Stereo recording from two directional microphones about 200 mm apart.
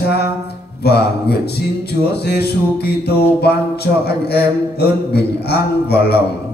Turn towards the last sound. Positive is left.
turn(degrees=55)  # may be behind; listen again after turning